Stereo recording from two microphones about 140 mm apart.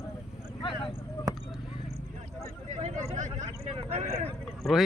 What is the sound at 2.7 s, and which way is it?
Speech, 55° right (ahead or behind).